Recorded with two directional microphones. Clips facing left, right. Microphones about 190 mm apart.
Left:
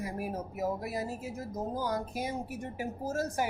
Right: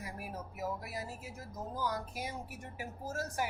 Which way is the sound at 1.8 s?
20° left (ahead or behind).